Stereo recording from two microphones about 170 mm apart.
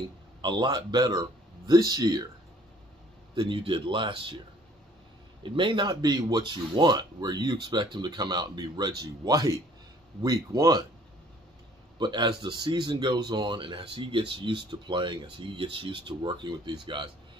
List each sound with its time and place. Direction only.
0.4 s speech: 25° right (ahead or behind)
3.3 s speech: 30° right (ahead or behind)
5.4 s speech: 30° right (ahead or behind)
12.0 s speech: 25° right (ahead or behind)